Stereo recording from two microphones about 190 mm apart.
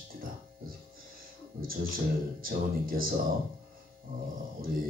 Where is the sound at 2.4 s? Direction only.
50° right (ahead or behind).